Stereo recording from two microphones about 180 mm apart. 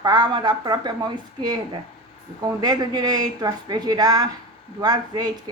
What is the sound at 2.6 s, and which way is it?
A woman's voice, 20° right (ahead or behind).